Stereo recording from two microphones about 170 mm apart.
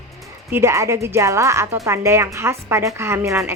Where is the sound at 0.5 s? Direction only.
15° right (ahead or behind).